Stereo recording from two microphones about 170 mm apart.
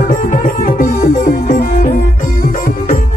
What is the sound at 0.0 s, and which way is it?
Music, 55° left (ahead or behind).